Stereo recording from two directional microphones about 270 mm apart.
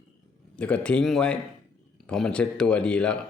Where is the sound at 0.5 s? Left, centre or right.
Centre.